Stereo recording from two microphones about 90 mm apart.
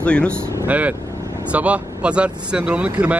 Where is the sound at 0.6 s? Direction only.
15° right (ahead or behind).